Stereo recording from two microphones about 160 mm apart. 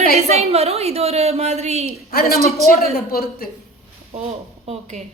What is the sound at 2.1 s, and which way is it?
A woman's voice, 70° left (ahead or behind).